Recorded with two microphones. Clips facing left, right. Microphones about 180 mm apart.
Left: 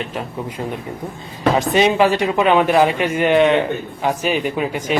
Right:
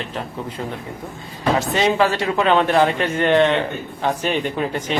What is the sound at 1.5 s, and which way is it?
Speech, 15° left (ahead or behind).